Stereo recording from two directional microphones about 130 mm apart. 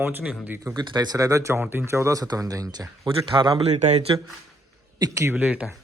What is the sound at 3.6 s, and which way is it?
Speech, 60° right (ahead or behind).